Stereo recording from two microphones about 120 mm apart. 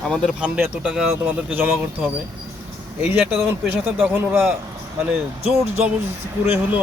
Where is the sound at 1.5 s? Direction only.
15° right (ahead or behind).